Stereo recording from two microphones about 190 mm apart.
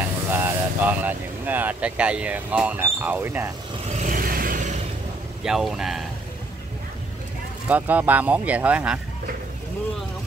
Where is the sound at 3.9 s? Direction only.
40° right (ahead or behind).